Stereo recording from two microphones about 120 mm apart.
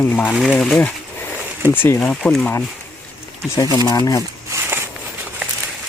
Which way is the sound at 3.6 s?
35° left (ahead or behind).